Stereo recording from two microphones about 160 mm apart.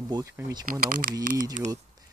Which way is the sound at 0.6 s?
65° right (ahead or behind).